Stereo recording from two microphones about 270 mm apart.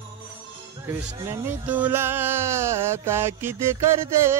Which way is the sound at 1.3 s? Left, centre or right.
Centre.